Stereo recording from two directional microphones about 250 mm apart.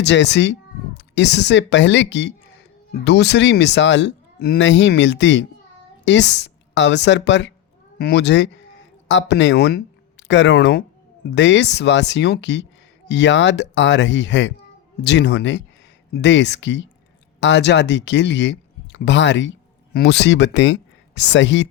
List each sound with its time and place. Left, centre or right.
0.0 s speech: left